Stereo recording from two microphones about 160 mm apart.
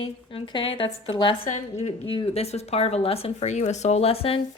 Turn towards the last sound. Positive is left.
turn(degrees=35)  # may be behind; listen again after turning